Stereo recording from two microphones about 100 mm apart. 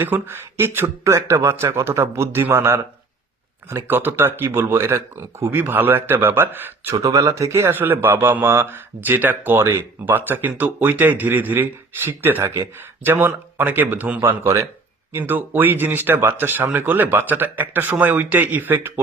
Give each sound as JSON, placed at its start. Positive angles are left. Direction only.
{"t": 0.0, "sound": "a man's voice", "side_deg": -25}
{"t": 6.9, "sound": "a man's voice", "side_deg": -35}